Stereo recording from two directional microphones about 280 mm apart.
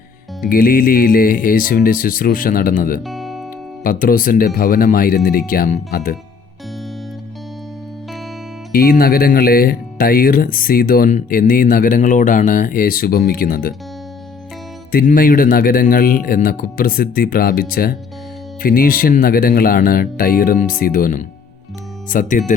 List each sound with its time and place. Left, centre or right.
0.4 s speech: left
3.0 s music: centre
3.8 s speech: left
8.7 s speech: left
14.9 s speech: left